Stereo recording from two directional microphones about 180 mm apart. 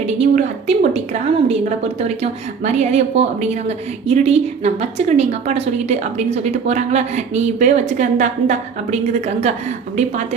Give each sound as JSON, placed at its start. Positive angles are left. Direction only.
{"t": 0.0, "sound": "a woman's voice", "side_deg": -35}